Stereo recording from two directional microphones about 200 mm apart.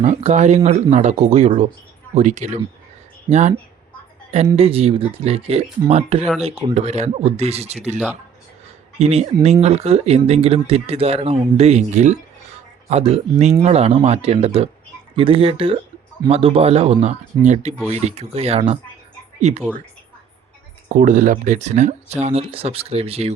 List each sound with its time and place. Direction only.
0.0 s speech: 35° right (ahead or behind)
9.0 s speech: 30° right (ahead or behind)
20.9 s speech: 40° right (ahead or behind)